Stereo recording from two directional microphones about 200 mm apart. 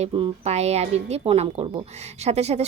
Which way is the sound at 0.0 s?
35° right (ahead or behind).